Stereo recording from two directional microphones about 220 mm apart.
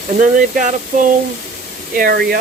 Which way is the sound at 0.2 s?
35° right (ahead or behind).